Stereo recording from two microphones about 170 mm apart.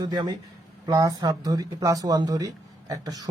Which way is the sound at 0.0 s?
25° right (ahead or behind).